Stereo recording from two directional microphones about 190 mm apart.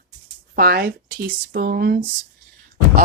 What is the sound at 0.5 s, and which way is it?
Speech, 55° right (ahead or behind).